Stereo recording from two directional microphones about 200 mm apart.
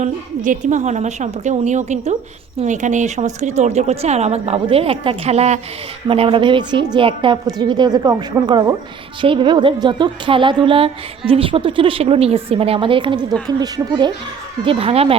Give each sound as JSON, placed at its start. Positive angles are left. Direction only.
{"t": 0.0, "sound": "a woman's voice", "side_deg": -40}